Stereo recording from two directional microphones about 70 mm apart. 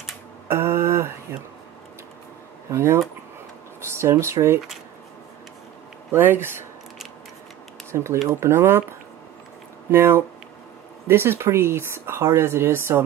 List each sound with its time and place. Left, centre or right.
0.5 s a sound: right
2.7 s speech: right
6.1 s speech: right
7.9 s speech: right
9.8 s speech: right